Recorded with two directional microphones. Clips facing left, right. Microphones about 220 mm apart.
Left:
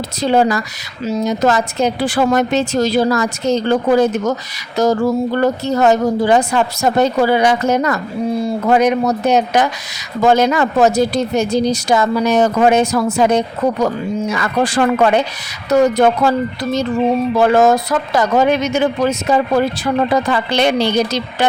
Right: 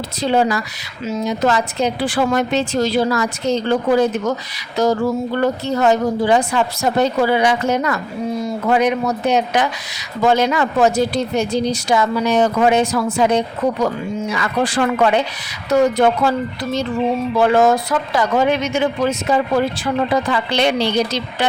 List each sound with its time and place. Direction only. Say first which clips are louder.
0.2 s speech: left 3 dB; 45° left (ahead or behind)
8.3 s speech: left 3 dB; 30° left (ahead or behind)